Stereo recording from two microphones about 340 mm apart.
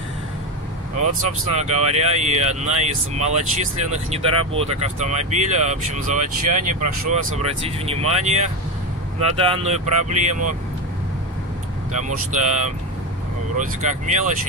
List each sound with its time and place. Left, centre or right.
1.5 s speech: centre
6.8 s speech: right
7.3 s speech: centre
12.3 s speech: right